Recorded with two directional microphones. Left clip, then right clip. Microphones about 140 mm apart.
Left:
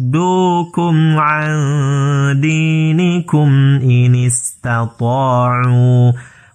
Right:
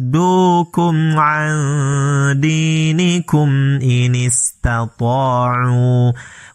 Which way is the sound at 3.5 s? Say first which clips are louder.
Left 3 dB; 15° right (ahead or behind).